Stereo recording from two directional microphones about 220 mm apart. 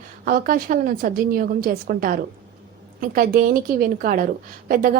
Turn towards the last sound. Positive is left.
turn(degrees=-40)  # may be behind; listen again after turning